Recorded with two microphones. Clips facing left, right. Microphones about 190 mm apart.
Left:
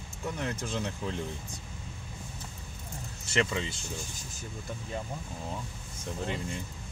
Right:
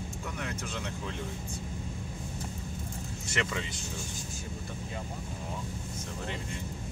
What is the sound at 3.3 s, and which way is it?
Speech, 25° left (ahead or behind).